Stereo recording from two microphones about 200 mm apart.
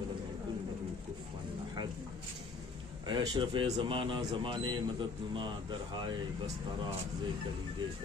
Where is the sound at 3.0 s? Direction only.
25° right (ahead or behind).